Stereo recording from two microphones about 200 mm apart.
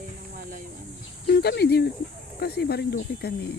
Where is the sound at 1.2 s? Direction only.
50° left (ahead or behind).